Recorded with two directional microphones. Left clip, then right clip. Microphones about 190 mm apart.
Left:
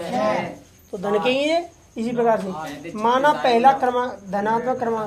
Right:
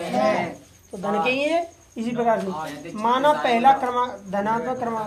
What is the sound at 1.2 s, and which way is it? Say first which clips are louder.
Speech: even; 40° left (ahead or behind).